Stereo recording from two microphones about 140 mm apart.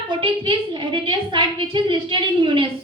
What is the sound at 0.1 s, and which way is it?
A woman's voice, 35° right (ahead or behind).